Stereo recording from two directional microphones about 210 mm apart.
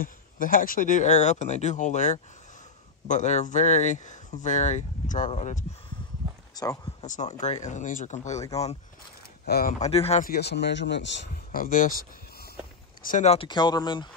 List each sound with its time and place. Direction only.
0.0 s speech: 40° left (ahead or behind)
6.5 s speech: 15° left (ahead or behind)
7.0 s speech: 35° left (ahead or behind)
9.5 s speech: 45° left (ahead or behind)
9.8 s speech: 30° left (ahead or behind)
10.2 s speech: 50° left (ahead or behind)
11.5 s speech: 40° left (ahead or behind)
13.0 s speech: 35° left (ahead or behind)